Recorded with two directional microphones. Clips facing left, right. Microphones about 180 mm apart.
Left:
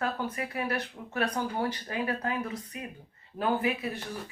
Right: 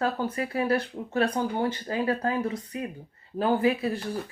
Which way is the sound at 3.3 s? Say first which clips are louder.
Right 5 dB; 30° right (ahead or behind).